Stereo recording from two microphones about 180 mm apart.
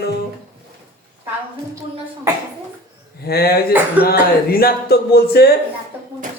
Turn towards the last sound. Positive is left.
turn(degrees=60)  # may be behind; listen again after turning